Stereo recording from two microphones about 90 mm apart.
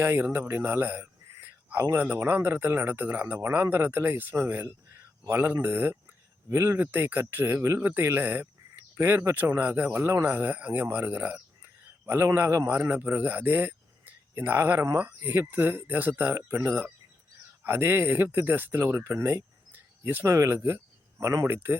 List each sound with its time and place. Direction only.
0.0 s a man's voice: 25° right (ahead or behind)